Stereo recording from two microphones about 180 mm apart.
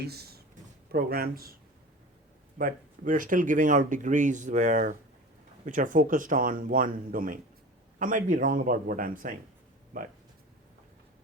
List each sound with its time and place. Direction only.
0.0 s speech: 60° right (ahead or behind)
2.6 s speech: 50° right (ahead or behind)